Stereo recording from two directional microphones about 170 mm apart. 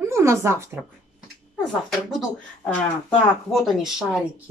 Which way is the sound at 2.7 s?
5° left (ahead or behind).